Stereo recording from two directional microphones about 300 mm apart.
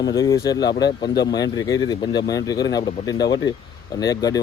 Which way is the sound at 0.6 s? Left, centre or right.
Left.